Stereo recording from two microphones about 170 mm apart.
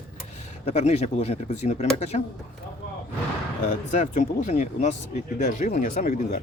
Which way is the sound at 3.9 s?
45° left (ahead or behind).